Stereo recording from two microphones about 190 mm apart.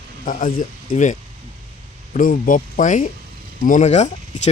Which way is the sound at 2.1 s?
45° left (ahead or behind).